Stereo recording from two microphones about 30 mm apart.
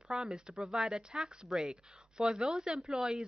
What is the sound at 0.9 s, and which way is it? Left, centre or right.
Speech, centre.